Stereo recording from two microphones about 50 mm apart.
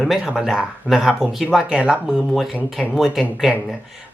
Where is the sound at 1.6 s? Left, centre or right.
Centre.